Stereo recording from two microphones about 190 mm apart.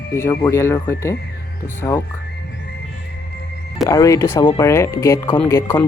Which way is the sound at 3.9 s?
15° left (ahead or behind).